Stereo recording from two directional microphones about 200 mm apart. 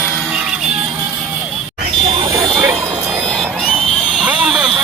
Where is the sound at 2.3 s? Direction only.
20° right (ahead or behind).